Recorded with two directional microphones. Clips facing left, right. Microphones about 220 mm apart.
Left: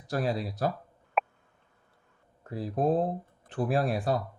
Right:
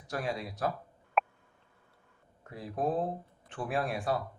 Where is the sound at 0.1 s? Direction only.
35° left (ahead or behind).